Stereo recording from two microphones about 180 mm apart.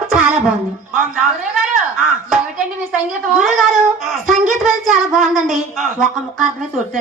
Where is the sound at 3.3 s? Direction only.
Centre (ahead or behind).